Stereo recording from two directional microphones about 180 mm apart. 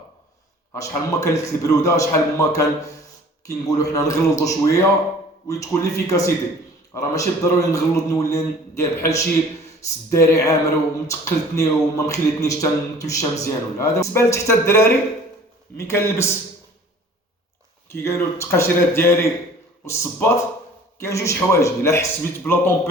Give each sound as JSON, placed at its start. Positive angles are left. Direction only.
{"t": 0.7, "sound": "a man's voice", "side_deg": 15}
{"t": 17.8, "sound": "speech", "side_deg": 15}